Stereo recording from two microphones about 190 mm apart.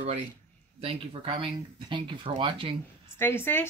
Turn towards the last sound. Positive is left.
turn(degrees=10)  # may be behind; listen again after turning